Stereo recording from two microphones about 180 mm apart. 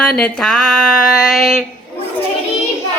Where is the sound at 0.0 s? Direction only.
5° left (ahead or behind).